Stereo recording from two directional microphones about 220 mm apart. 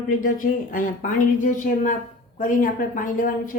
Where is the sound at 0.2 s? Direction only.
40° left (ahead or behind).